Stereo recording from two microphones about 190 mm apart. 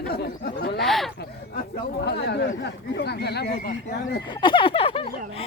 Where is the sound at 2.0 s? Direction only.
60° left (ahead or behind).